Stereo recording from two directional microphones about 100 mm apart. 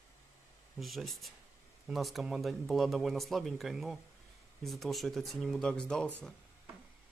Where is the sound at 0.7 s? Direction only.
Centre (ahead or behind).